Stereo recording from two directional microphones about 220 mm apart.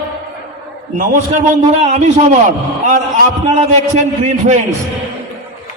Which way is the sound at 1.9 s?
35° right (ahead or behind).